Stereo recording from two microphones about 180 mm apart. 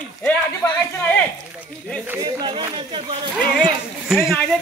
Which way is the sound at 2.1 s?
20° right (ahead or behind).